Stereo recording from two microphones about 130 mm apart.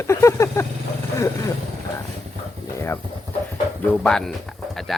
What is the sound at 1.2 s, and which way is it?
Speech, 25° left (ahead or behind).